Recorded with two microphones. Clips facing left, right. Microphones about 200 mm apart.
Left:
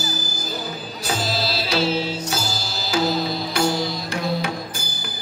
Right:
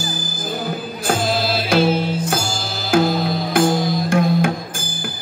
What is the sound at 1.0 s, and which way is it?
Music, 50° right (ahead or behind).